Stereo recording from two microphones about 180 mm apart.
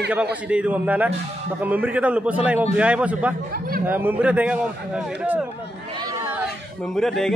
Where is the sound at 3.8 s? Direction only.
10° right (ahead or behind).